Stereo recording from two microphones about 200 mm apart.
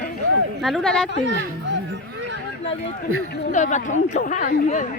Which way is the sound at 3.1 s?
90° right.